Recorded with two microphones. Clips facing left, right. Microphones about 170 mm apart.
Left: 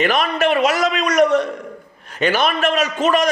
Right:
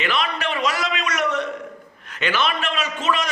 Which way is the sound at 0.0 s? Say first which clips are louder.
Left 7 dB; 45° left (ahead or behind).